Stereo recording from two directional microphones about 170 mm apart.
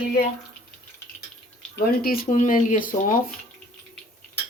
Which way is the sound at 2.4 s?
50° left (ahead or behind).